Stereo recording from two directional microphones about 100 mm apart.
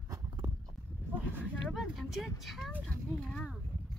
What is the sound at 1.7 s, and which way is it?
Vehicle, centre (ahead or behind).